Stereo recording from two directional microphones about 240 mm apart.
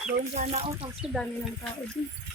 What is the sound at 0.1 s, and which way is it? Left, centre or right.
Speech, right.